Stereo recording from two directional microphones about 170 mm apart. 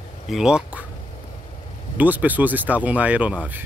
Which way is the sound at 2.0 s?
10° right (ahead or behind).